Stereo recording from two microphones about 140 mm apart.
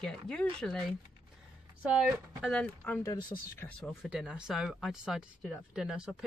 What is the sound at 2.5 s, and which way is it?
Speech, 10° left (ahead or behind).